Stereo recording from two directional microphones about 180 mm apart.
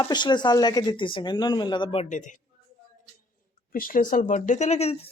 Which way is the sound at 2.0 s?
45° left (ahead or behind).